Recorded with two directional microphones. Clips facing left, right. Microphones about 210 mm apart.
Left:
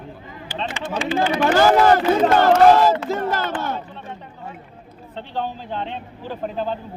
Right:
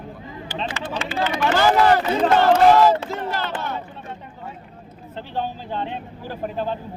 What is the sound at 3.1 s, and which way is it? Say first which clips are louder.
Speech: left 4 dB; 45° left (ahead or behind).